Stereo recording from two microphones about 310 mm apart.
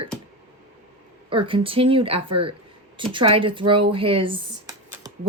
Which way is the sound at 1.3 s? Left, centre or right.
Centre.